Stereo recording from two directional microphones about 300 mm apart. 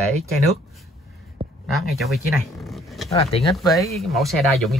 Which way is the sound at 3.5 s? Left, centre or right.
Centre.